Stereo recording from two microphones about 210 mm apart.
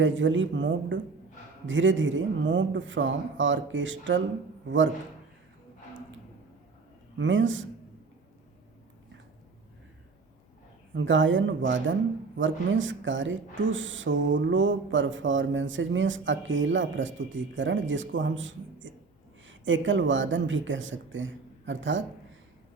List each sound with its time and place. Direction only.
0.0 s speech: 60° right (ahead or behind)
7.2 s speech: 65° right (ahead or behind)
10.9 s speech: 65° right (ahead or behind)